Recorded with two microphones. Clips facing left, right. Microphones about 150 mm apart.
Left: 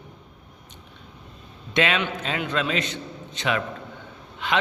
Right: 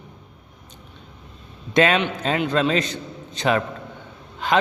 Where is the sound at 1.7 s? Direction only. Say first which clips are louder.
Right 5 dB; 40° right (ahead or behind).